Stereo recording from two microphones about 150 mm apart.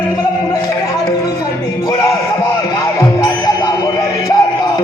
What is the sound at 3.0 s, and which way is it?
Music, 25° left (ahead or behind).